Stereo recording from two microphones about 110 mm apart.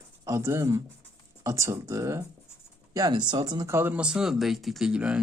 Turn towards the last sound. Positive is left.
turn(degrees=-10)  # may be behind; listen again after turning